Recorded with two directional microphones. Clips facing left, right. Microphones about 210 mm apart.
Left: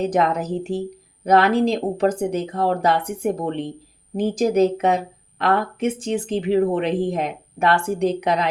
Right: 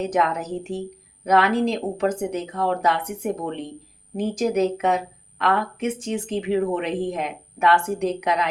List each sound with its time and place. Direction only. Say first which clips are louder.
0.1 s speech: left 3 dB; 35° left (ahead or behind)